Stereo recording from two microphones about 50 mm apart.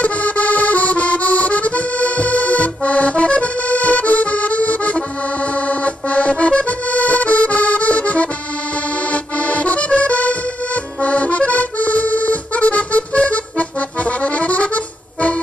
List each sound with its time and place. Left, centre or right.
0.0 s accordion: left